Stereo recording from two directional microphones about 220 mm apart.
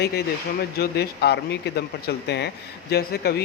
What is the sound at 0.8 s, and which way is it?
Speech, 45° left (ahead or behind).